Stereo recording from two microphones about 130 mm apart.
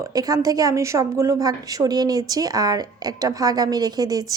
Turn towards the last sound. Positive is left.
turn(degrees=-30)  # may be behind; listen again after turning